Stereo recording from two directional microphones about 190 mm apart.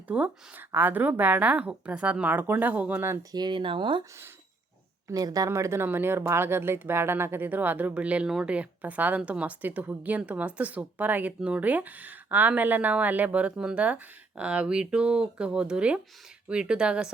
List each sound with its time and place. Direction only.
0.1 s speech: 10° right (ahead or behind); by 4.0 s 25° right (ahead or behind)
5.0 s speech: 20° right (ahead or behind)